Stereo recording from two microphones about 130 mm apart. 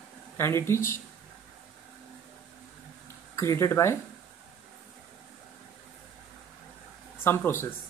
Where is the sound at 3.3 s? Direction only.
20° left (ahead or behind).